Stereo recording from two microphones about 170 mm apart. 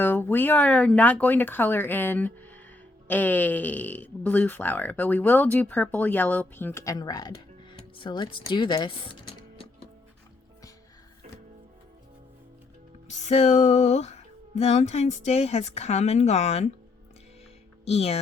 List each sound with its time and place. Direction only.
0.0 s speech: 10° left (ahead or behind); by 9.6 s 30° left (ahead or behind)
13.1 s music: 40° left (ahead or behind)
17.8 s music: 40° left (ahead or behind)